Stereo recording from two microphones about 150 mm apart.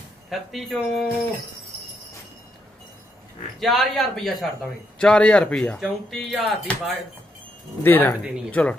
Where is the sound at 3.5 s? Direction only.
Centre (ahead or behind).